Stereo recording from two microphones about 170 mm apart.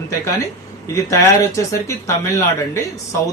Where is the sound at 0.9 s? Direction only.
15° left (ahead or behind).